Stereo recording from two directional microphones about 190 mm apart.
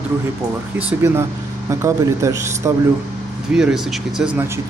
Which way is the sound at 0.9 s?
10° right (ahead or behind).